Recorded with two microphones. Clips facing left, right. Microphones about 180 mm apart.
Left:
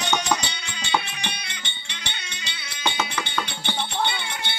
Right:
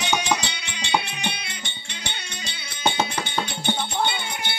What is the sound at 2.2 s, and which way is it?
Music, 50° right (ahead or behind).